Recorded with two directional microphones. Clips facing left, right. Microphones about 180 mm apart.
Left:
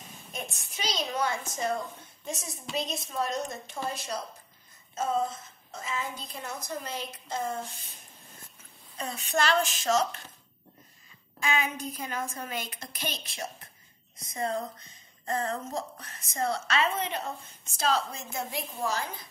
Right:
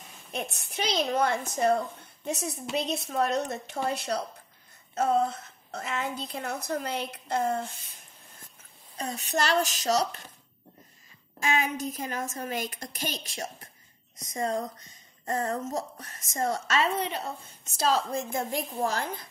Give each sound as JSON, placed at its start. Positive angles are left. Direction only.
{"t": 0.3, "sound": "a woman's voice", "side_deg": -65}
{"t": 8.9, "sound": "a woman's voice", "side_deg": -40}
{"t": 11.3, "sound": "a woman's voice", "side_deg": -40}